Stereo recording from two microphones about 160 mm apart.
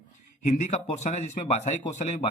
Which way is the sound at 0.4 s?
45° left (ahead or behind).